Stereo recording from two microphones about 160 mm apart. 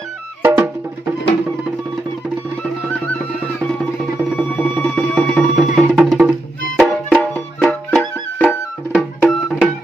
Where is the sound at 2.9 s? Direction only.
10° left (ahead or behind).